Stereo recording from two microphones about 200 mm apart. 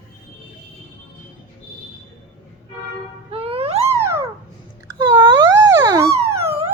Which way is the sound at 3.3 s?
30° right (ahead or behind).